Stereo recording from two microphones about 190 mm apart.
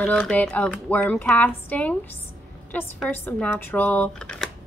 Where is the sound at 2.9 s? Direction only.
10° left (ahead or behind).